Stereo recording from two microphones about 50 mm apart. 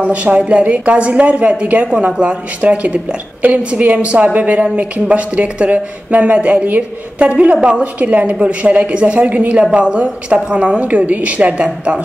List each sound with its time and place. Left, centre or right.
0.0 s a woman's voice: right